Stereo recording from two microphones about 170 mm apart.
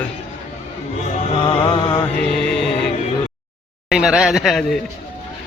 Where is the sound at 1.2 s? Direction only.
30° left (ahead or behind).